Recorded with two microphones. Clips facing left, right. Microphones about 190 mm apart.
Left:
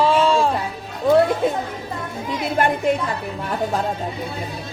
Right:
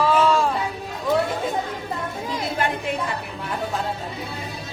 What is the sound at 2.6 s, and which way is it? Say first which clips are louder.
Speech: left 6 dB; 55° left (ahead or behind).